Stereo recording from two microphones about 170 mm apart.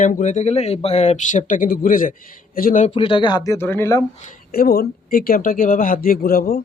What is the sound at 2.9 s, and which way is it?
Speech, 30° left (ahead or behind).